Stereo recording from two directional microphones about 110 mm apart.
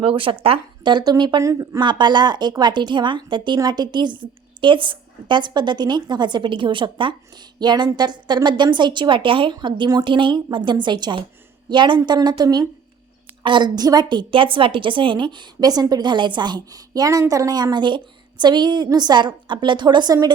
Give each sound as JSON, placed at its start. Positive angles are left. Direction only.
{"t": 0.0, "sound": "a woman's voice", "side_deg": -55}
{"t": 1.8, "sound": "a woman's voice", "side_deg": -45}